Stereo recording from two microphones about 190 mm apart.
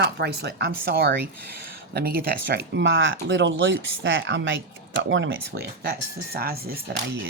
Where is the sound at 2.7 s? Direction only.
70° right (ahead or behind).